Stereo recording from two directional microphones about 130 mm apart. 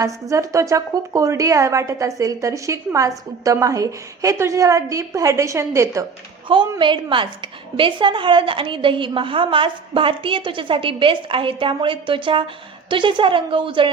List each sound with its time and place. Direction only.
0.0 s a woman's voice: 25° right (ahead or behind)
6.7 s a woman's voice: 40° right (ahead or behind)